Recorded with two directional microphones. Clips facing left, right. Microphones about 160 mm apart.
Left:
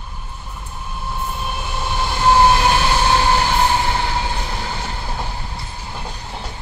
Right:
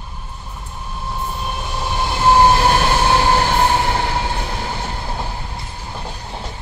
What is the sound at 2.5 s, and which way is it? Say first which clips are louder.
Train: right 1 dB; 40° right (ahead or behind).